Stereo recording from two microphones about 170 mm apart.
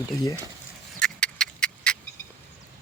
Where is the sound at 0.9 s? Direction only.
5° left (ahead or behind).